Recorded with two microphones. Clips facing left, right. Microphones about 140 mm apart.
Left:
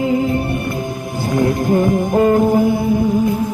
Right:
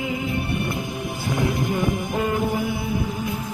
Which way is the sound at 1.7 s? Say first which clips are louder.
Left 9 dB; 45° left (ahead or behind).